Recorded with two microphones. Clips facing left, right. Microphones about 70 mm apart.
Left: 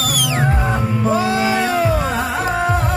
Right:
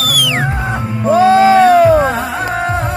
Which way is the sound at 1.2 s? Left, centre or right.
Right.